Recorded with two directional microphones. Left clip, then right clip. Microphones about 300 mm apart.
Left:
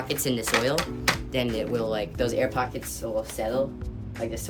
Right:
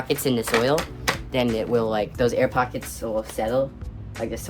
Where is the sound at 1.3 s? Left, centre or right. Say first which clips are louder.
Right 5 dB; centre.